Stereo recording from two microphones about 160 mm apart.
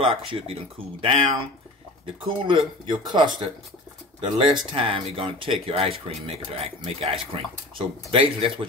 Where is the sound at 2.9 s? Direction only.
30° right (ahead or behind).